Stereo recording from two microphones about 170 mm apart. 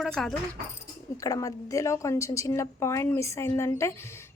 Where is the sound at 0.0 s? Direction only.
Centre (ahead or behind).